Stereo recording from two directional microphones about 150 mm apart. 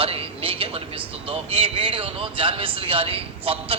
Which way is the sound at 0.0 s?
40° right (ahead or behind).